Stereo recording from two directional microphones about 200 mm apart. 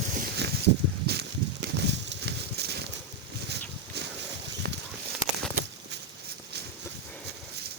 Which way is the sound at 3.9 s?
55° right (ahead or behind).